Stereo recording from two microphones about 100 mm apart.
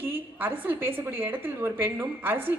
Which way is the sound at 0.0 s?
20° right (ahead or behind).